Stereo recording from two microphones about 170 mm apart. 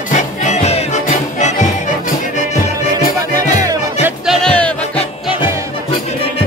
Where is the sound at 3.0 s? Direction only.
50° left (ahead or behind).